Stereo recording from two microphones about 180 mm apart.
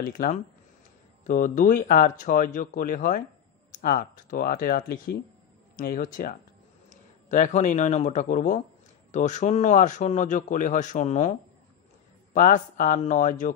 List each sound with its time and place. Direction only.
0.0 s speech: 50° left (ahead or behind)
12.4 s speech: 45° left (ahead or behind)